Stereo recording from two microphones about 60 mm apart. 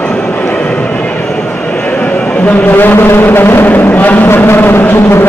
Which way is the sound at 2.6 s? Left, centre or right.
Left.